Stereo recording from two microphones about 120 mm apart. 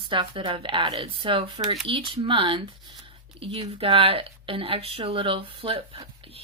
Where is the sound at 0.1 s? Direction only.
45° right (ahead or behind).